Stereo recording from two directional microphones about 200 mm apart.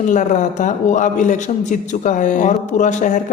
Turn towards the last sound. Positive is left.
turn(degrees=40)  # may be behind; listen again after turning